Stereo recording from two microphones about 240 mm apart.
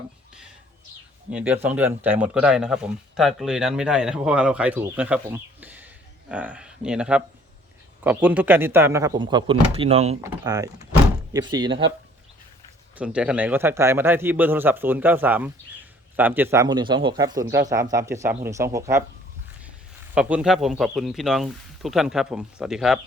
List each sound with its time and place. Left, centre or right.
1.3 s a man's voice: centre; by 10.2 s right
10.2 s a man's voice: centre
13.0 s a man's voice: centre
20.1 s speech: centre